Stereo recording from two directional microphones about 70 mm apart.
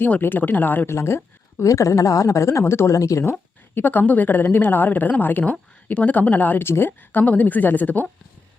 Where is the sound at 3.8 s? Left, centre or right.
Left.